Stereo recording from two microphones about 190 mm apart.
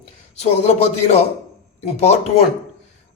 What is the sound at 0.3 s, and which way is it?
Speech, 35° left (ahead or behind).